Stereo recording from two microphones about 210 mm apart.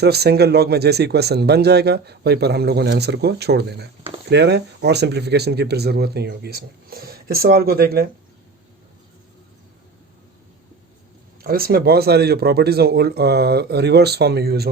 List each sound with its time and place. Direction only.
0.0 s speech: 50° right (ahead or behind)
11.4 s speech: 45° right (ahead or behind)